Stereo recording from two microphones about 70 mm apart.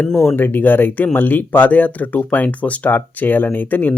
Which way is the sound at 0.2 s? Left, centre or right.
Left.